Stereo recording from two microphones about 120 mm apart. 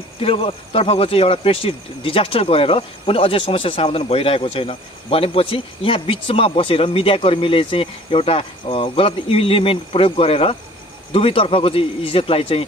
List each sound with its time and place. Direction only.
0.2 s speech: 50° left (ahead or behind)